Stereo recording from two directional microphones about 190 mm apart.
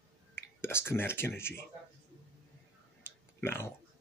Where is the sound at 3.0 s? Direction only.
10° left (ahead or behind).